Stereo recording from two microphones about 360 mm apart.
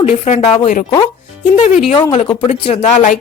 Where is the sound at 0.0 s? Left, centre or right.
Centre.